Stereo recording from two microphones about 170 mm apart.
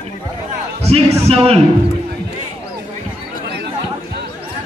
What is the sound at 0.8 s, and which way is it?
Music, 40° right (ahead or behind).